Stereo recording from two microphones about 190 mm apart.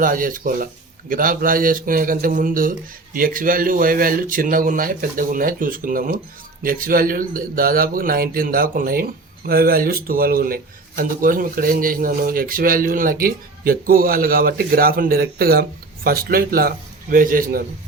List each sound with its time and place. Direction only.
0.0 s speech: 45° right (ahead or behind)